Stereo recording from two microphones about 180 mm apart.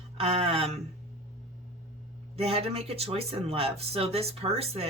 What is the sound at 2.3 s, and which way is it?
Speech, 35° right (ahead or behind).